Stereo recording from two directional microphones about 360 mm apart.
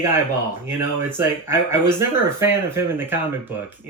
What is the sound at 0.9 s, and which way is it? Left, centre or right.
Speech, centre.